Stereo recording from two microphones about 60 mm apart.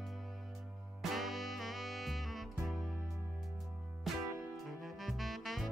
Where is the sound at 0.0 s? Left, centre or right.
Centre.